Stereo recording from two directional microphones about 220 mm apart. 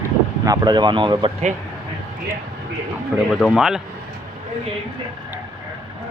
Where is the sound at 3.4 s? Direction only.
Centre (ahead or behind).